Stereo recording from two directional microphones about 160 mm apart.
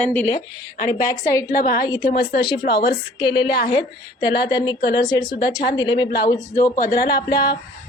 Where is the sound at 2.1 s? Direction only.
75° left (ahead or behind).